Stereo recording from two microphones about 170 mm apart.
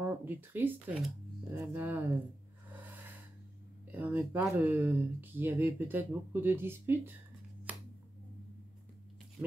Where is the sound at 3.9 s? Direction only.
10° right (ahead or behind).